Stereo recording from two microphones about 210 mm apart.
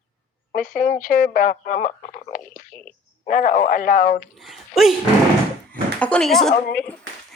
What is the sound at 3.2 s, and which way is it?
Speech, 40° left (ahead or behind).